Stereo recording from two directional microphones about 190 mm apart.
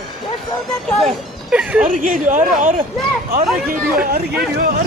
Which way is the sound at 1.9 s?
45° right (ahead or behind).